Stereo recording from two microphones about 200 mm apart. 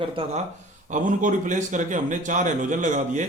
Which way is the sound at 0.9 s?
40° right (ahead or behind).